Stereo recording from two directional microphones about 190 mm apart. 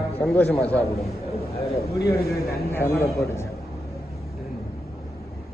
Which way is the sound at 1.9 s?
15° left (ahead or behind).